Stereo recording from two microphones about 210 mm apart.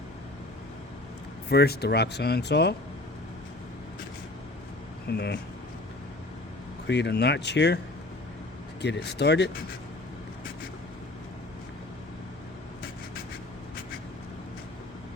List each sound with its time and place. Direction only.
1.5 s speech: 50° left (ahead or behind)
5.0 s speech: 50° left (ahead or behind)
6.8 s speech: 55° left (ahead or behind)
8.8 s speech: 55° left (ahead or behind)